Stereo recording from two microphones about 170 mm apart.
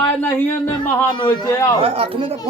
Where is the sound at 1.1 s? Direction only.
25° left (ahead or behind).